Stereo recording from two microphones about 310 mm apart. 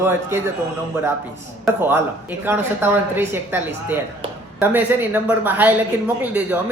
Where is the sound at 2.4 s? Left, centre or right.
Centre.